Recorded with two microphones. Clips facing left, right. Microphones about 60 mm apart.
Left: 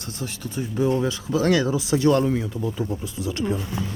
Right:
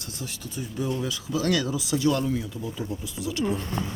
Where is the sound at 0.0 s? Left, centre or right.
Left.